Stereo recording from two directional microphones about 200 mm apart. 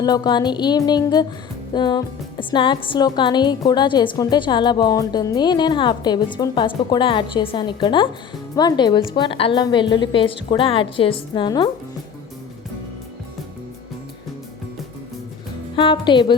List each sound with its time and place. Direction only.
0.0 s speech: 20° left (ahead or behind)
15.7 s speech: 25° left (ahead or behind)